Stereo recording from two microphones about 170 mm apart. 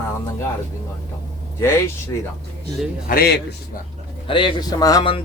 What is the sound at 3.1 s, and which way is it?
Speech, 65° left (ahead or behind).